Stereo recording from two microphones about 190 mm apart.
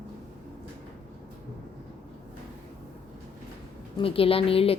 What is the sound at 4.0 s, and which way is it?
Speech, 30° left (ahead or behind).